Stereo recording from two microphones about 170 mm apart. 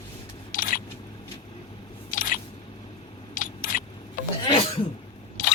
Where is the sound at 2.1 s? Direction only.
50° left (ahead or behind).